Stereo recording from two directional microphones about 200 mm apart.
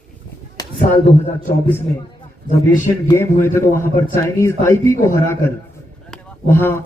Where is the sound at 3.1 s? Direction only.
10° left (ahead or behind).